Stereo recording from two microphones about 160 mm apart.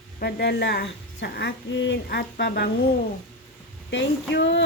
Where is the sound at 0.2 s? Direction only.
85° left.